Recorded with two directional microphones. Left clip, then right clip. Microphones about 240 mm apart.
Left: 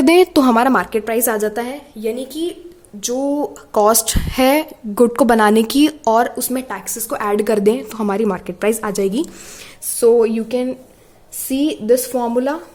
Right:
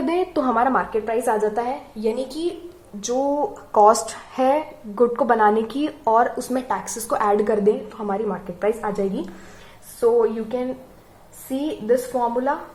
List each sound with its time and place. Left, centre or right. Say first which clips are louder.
0.0 s a woman's voice: left 10 dB; left
2.0 s a woman's voice: left 4 dB; left